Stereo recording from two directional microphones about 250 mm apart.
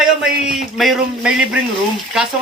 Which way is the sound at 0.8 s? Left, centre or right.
Centre.